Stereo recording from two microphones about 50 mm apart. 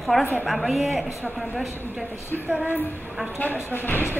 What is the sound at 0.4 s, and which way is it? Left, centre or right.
Speech, centre.